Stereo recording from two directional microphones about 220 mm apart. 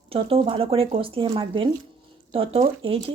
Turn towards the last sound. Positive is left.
turn(degrees=-25)  # may be behind; listen again after turning